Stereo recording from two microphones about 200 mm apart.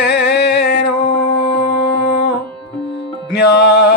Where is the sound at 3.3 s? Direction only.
60° left (ahead or behind).